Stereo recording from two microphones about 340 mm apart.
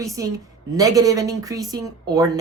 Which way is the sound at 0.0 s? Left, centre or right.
Centre.